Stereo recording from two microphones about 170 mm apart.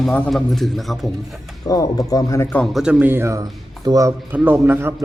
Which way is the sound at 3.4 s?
25° right (ahead or behind).